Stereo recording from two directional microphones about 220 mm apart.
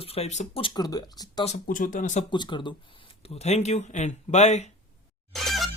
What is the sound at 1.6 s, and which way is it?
Speech, 35° left (ahead or behind).